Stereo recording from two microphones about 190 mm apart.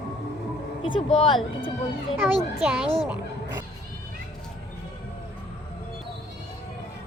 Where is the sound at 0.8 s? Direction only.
30° left (ahead or behind).